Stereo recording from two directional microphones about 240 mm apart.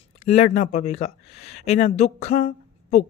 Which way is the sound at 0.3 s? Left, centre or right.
Left.